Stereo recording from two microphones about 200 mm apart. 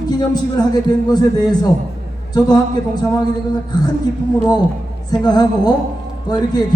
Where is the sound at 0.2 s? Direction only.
20° left (ahead or behind).